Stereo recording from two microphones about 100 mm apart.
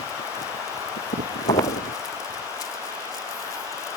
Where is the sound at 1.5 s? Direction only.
35° left (ahead or behind).